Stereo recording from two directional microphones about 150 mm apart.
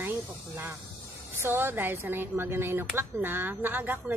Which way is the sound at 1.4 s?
15° right (ahead or behind).